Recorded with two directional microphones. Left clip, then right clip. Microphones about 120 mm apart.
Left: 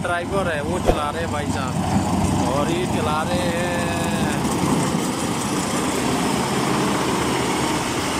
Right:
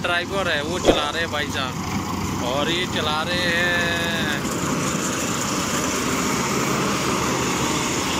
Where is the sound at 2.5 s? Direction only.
10° left (ahead or behind).